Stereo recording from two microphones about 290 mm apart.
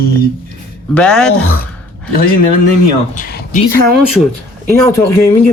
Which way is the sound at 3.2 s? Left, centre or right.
Left.